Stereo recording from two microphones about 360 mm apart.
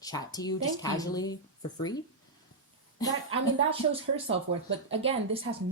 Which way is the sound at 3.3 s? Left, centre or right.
Centre.